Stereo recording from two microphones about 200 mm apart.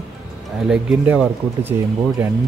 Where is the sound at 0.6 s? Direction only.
5° right (ahead or behind).